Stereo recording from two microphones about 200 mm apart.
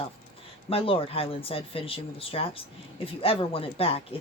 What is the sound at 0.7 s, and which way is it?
Speech, 30° left (ahead or behind).